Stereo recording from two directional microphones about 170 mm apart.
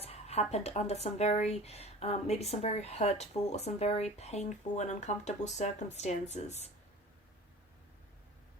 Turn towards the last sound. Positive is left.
turn(degrees=40)  # may be behind; listen again after turning